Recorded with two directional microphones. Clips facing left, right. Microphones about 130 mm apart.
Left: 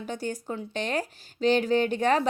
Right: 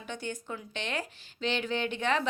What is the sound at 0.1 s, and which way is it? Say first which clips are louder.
Speech: left 4 dB; 40° left (ahead or behind).